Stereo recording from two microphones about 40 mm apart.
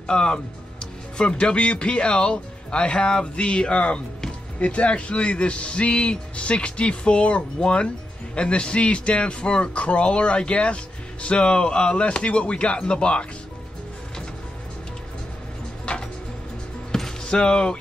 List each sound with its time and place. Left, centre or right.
0.0 s speech: left
15.9 s a sound: left
17.2 s speech: left